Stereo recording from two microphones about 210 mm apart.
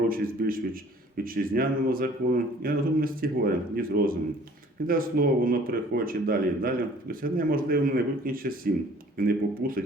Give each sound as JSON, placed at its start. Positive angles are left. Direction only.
{"t": 0.1, "sound": "a man's voice", "side_deg": -45}